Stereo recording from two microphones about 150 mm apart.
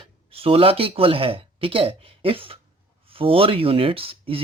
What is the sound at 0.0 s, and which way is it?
Speech, 40° right (ahead or behind).